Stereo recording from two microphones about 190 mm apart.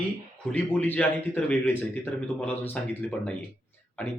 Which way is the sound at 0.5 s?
10° left (ahead or behind).